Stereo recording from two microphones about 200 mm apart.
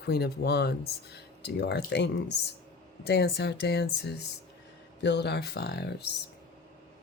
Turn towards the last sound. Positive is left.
turn(degrees=55)  # may be behind; listen again after turning